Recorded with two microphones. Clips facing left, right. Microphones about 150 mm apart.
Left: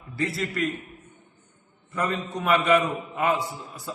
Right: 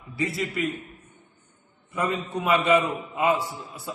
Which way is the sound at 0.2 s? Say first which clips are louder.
Even; centre (ahead or behind).